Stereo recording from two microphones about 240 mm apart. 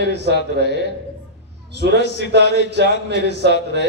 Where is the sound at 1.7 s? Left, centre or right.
Right.